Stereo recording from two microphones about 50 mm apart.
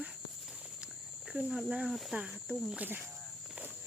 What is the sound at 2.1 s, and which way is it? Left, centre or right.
Speech, right.